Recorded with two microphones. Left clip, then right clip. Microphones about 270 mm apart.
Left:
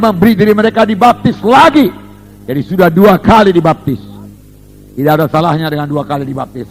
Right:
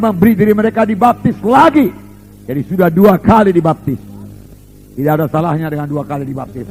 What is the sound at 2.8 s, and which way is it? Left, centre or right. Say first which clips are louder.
A man's voice: left 3 dB; left.